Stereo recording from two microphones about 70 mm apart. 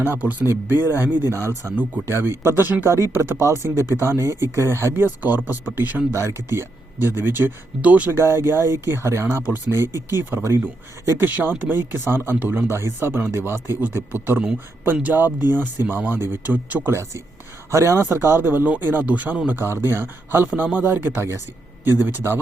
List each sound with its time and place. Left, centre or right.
0.0 s speech: right
6.1 s speech: right
8.1 s speech: right
11.2 s speech: right
17.7 s speech: right
19.5 s speech: right